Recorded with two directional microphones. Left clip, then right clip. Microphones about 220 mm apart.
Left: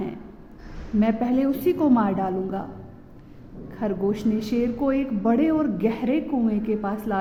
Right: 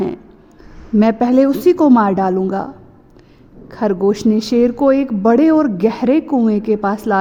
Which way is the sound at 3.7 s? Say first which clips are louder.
Right 10 dB; 45° right (ahead or behind).